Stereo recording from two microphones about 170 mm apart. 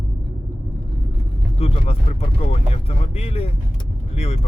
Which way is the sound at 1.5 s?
35° left (ahead or behind).